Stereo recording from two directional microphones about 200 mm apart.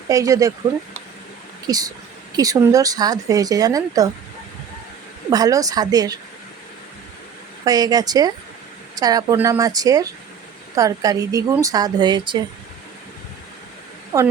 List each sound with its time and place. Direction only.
0.1 s speech: 15° right (ahead or behind)
1.6 s speech: 20° right (ahead or behind)
5.3 s a woman's voice: 15° right (ahead or behind)
7.6 s a woman's voice: 20° right (ahead or behind)
14.1 s a woman's voice: 20° right (ahead or behind)